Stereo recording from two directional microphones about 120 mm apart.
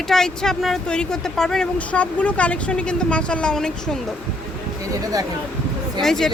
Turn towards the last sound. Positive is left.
turn(degrees=5)  # may be behind; listen again after turning